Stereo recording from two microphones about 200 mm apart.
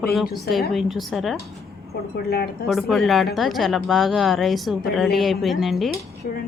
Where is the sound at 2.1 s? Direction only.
50° left (ahead or behind).